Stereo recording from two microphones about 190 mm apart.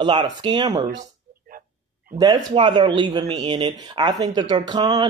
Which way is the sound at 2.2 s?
25° right (ahead or behind).